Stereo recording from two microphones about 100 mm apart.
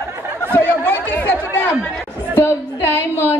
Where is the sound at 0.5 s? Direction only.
20° left (ahead or behind).